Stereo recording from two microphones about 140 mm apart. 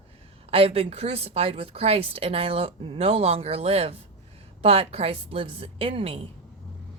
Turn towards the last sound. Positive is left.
turn(degrees=-40)  # may be behind; listen again after turning